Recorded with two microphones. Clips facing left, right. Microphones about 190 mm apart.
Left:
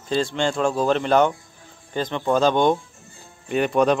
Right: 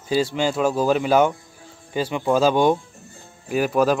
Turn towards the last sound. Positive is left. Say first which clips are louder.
# even
turn(degrees=-5)  # may be behind; listen again after turning